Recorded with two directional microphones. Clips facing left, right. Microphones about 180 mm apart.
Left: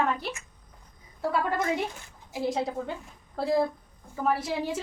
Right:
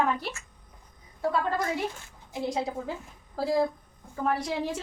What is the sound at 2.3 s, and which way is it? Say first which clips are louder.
A woman's voice: left 1 dB; centre (ahead or behind).